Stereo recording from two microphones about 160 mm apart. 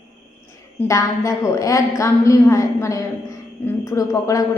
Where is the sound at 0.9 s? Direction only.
20° left (ahead or behind).